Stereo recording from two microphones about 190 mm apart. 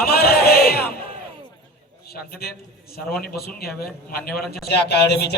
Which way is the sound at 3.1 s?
55° left (ahead or behind).